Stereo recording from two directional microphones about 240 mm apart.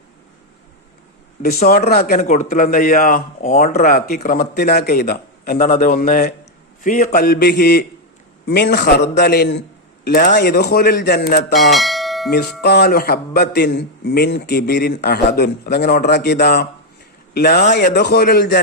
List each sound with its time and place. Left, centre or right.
1.4 s a man's voice: left
11.6 s bell: centre
12.6 s a man's voice: left